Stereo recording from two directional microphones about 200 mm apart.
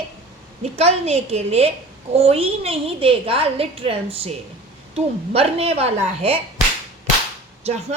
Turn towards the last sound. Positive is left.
turn(degrees=-35)  # may be behind; listen again after turning